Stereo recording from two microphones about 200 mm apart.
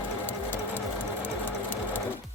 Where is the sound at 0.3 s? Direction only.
10° left (ahead or behind).